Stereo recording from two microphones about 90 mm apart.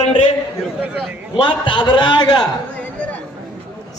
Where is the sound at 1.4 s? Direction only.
60° left (ahead or behind).